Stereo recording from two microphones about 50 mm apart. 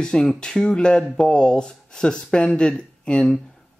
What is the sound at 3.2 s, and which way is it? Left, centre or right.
Speech, centre.